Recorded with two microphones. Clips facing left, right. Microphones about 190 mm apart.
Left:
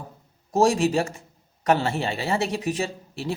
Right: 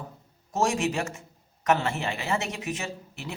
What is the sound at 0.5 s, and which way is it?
Speech, 35° left (ahead or behind).